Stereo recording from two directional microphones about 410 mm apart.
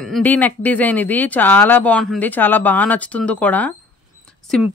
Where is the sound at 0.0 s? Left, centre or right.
Centre.